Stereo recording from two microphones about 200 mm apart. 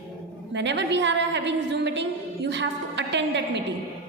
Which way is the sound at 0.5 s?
60° right (ahead or behind).